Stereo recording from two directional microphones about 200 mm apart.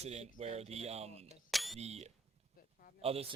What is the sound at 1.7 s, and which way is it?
Speech, 30° right (ahead or behind).